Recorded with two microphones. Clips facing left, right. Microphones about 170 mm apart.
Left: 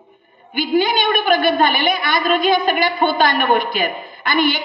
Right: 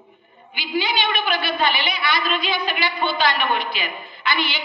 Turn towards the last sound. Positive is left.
turn(degrees=50)  # may be behind; listen again after turning